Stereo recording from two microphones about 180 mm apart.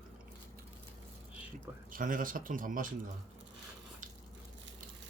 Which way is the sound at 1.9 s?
50° right (ahead or behind).